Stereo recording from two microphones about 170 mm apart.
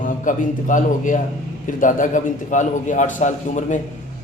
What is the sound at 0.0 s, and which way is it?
A man's voice, 50° left (ahead or behind).